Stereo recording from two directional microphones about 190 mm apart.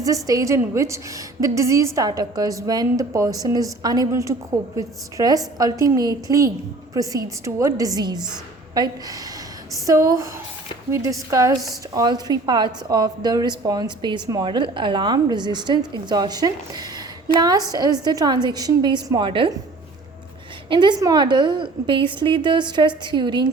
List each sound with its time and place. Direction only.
0.0 s a woman's voice: 15° right (ahead or behind)
20.7 s a woman's voice: 25° right (ahead or behind)